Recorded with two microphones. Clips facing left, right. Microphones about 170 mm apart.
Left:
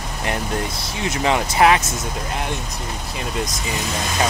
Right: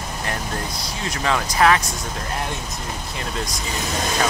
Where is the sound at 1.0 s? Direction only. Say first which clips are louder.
Left 4 dB; 20° left (ahead or behind).